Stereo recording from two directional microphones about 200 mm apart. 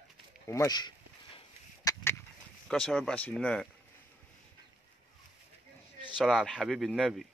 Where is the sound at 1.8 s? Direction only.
15° left (ahead or behind).